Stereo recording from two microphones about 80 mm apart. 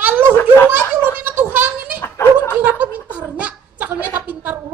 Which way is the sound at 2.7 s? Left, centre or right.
Centre.